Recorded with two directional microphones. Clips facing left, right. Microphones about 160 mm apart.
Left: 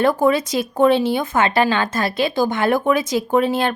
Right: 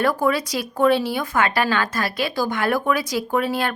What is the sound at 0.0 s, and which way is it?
Speech, 25° left (ahead or behind).